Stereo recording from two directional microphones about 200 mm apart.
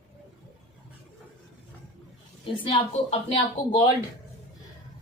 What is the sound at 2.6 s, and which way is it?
Speech, 25° left (ahead or behind).